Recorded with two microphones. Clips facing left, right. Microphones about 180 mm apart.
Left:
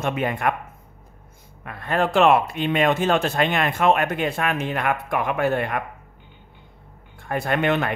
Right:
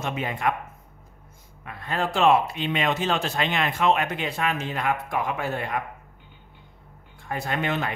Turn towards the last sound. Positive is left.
turn(degrees=60)  # may be behind; listen again after turning